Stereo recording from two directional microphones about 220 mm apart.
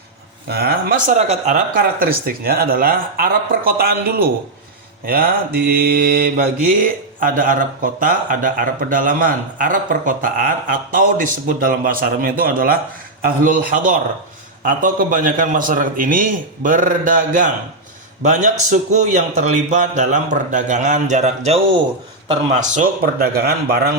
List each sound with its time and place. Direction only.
0.4 s a man's voice: 45° right (ahead or behind)